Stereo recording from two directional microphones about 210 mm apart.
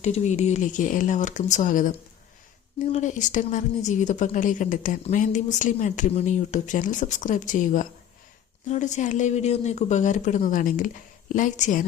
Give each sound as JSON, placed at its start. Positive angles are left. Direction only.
{"t": 0.0, "sound": "speech", "side_deg": 35}